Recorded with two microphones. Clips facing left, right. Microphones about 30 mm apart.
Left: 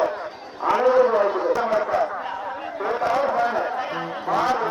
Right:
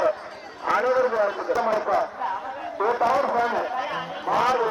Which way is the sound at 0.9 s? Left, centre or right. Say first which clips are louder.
Left 4 dB; left.